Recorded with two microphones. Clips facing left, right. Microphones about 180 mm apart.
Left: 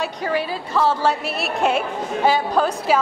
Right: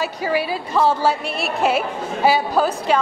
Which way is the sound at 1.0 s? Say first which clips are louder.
Right 1 dB; centre (ahead or behind).